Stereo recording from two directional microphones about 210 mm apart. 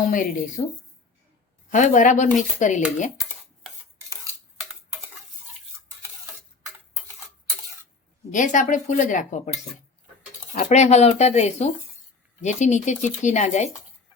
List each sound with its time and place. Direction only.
0.0 s speech: 40° left (ahead or behind)
1.7 s speech: 35° left (ahead or behind)
8.3 s speech: 35° left (ahead or behind)